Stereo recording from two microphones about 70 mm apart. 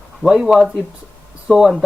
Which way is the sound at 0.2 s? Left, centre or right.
Centre.